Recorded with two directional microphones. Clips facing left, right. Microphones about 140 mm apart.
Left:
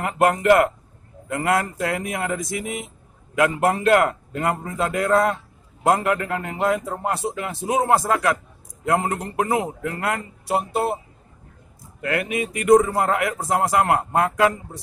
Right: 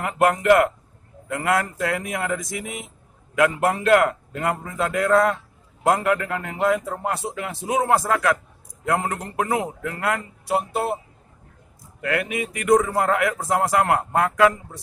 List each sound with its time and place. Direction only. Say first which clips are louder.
0.0 s a man's voice: left 1 dB; 30° left (ahead or behind)
12.0 s a man's voice: left 1 dB; 30° left (ahead or behind)